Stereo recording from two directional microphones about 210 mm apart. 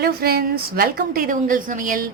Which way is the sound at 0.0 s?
50° right (ahead or behind).